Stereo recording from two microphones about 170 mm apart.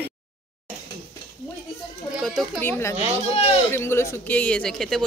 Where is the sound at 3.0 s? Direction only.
35° left (ahead or behind).